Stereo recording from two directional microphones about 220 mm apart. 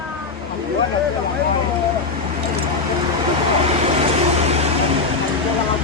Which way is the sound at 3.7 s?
30° right (ahead or behind).